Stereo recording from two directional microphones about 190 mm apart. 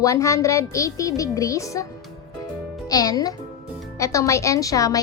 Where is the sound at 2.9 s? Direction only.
20° left (ahead or behind).